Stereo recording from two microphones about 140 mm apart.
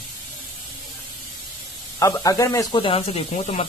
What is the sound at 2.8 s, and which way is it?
Speech, 40° left (ahead or behind).